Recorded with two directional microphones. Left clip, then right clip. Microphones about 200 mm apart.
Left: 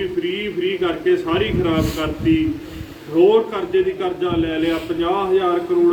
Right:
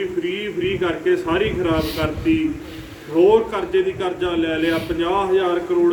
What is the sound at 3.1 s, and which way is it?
A man's voice, centre (ahead or behind).